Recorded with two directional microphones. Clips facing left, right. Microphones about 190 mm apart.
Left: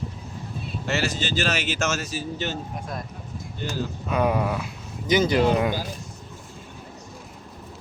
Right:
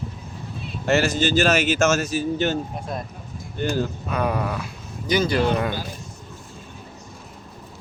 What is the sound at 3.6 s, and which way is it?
Speech, 55° right (ahead or behind).